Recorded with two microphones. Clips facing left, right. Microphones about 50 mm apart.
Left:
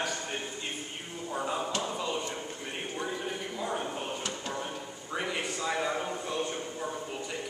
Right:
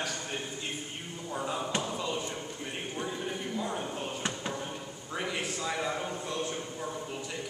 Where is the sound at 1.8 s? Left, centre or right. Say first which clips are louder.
Left 1 dB; centre.